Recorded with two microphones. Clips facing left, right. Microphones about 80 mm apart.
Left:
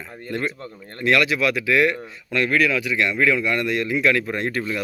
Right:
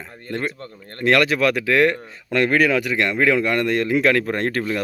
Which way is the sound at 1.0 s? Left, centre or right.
Right.